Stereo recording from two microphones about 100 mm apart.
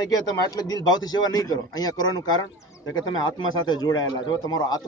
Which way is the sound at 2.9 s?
45° left (ahead or behind).